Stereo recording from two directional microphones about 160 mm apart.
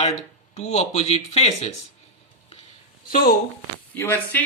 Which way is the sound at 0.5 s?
45° left (ahead or behind).